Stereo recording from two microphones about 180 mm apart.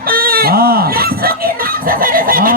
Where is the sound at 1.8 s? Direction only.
50° right (ahead or behind).